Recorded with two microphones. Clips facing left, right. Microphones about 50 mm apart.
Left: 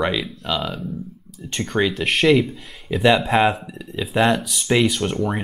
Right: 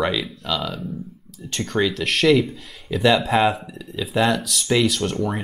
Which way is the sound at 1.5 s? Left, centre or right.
Centre.